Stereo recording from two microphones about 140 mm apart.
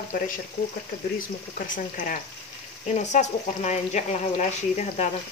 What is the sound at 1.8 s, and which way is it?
Speech, 70° left (ahead or behind).